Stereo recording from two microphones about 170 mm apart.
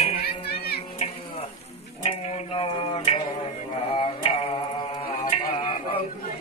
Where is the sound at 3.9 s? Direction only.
30° left (ahead or behind).